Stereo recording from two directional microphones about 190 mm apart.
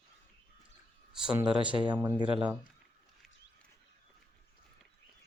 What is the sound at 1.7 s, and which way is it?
Speech, 15° right (ahead or behind).